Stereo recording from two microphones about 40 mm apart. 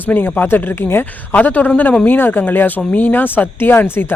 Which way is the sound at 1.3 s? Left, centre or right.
Left.